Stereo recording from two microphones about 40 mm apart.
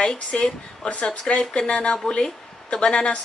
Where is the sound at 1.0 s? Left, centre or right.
Left.